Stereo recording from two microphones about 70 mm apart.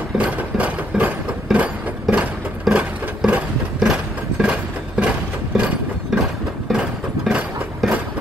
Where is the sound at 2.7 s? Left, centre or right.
Centre.